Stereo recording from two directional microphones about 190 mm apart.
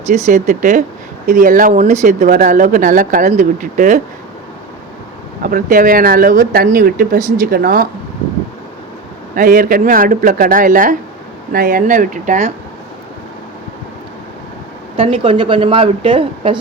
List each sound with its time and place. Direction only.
0.1 s speech: 40° right (ahead or behind)
5.4 s speech: 50° right (ahead or behind)
9.3 s speech: 45° right (ahead or behind)
14.9 s speech: 30° right (ahead or behind)